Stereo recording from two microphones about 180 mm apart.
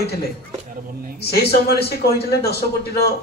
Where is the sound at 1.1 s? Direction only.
60° left (ahead or behind).